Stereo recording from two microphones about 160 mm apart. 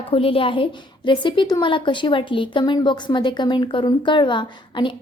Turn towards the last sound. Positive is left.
turn(degrees=30)  # may be behind; listen again after turning